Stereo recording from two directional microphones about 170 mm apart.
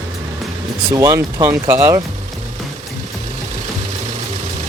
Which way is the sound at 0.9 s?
20° right (ahead or behind).